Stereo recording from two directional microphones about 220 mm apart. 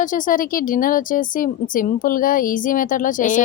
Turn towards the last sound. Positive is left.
turn(degrees=35)  # may be behind; listen again after turning